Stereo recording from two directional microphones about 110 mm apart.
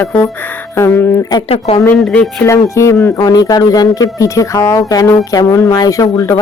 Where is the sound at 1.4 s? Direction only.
65° left (ahead or behind).